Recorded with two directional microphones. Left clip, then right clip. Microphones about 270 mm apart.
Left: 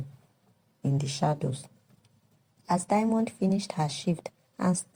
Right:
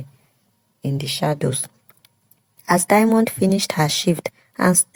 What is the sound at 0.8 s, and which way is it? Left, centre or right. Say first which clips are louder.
Speech: right 7 dB; right.